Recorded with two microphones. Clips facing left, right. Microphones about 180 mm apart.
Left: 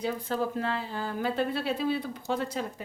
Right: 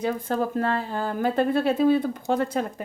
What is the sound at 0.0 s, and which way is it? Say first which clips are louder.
Speech: right 4 dB; 50° right (ahead or behind).